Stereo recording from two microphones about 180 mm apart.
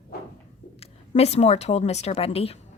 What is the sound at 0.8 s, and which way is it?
A woman's voice, 35° left (ahead or behind).